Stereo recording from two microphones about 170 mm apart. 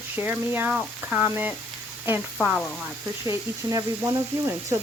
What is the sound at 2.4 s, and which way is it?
Speech, 10° left (ahead or behind).